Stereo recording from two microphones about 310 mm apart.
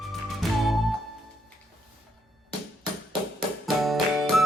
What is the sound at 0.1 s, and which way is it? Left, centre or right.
Music, centre.